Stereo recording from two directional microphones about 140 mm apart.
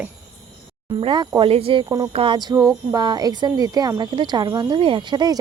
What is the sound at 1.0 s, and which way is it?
Speech, 35° right (ahead or behind).